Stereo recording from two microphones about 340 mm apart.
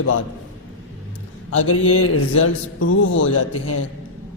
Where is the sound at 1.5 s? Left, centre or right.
Left.